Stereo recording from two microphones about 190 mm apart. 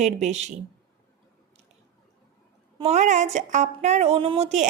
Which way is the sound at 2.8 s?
35° right (ahead or behind).